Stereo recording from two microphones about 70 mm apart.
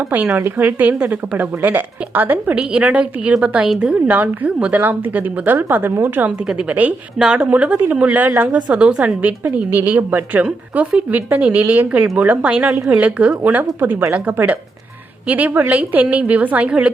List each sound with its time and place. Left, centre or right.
0.3 s a woman's voice: right
2.6 s a woman's voice: centre
6.5 s a woman's voice: centre
7.2 s a woman's voice: centre
7.5 s a woman's voice: right
15.3 s a woman's voice: right